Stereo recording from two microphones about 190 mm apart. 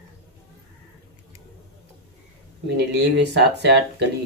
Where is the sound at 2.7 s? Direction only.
65° right (ahead or behind).